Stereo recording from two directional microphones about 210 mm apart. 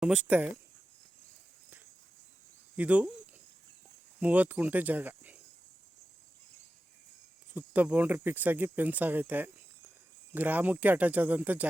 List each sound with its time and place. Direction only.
0.0 s speech: 5° right (ahead or behind)
2.7 s speech: 5° right (ahead or behind)
4.2 s speech: 5° right (ahead or behind)
7.5 s speech: 5° right (ahead or behind)